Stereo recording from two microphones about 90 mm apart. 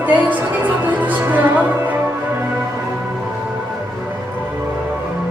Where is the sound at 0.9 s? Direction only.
20° right (ahead or behind).